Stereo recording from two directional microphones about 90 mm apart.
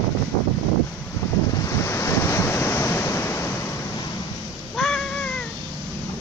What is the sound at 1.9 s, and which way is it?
Waves, 30° left (ahead or behind).